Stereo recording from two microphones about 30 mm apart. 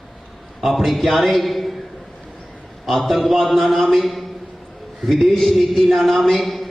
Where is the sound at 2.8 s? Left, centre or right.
Centre.